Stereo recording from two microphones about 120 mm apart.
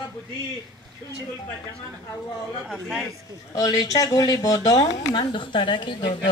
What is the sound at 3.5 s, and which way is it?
Speech, 30° left (ahead or behind).